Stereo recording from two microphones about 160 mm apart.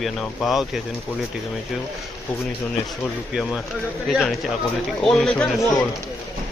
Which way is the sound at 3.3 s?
Centre (ahead or behind).